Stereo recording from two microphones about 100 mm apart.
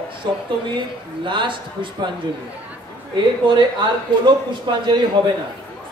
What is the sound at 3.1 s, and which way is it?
Speech, 50° right (ahead or behind).